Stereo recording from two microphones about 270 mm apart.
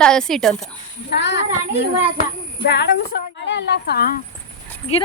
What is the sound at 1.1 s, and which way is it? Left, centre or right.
Speech, left.